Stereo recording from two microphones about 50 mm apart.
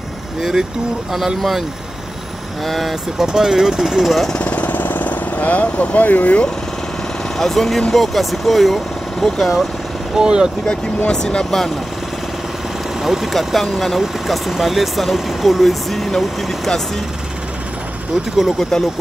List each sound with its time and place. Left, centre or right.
0.4 s speech: centre
2.6 s speech: centre
4.4 s jackhammer: left
7.3 s speech: centre
10.1 s speech: centre
11.1 s speech: centre
13.0 s speech: centre
18.6 s speech: centre